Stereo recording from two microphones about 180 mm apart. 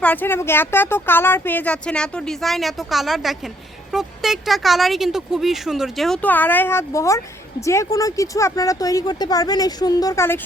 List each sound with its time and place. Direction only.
0.0 s speech: 10° left (ahead or behind)